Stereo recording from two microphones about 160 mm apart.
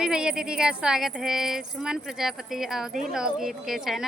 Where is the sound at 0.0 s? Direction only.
5° right (ahead or behind).